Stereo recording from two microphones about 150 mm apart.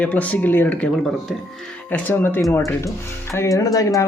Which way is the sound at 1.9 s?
10° left (ahead or behind).